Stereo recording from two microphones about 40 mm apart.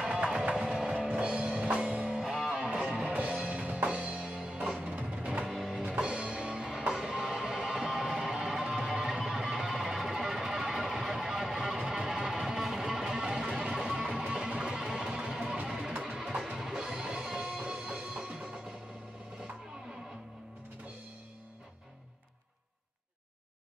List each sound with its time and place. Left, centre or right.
0.0 s music: right
1.3 s music: right
3.1 s music: right
5.4 s music: centre
6.0 s music: right
6.9 s music: centre
16.5 s music: centre